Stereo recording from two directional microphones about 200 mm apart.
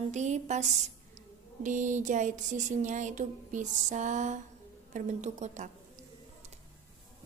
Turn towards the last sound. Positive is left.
turn(degrees=-35)  # may be behind; listen again after turning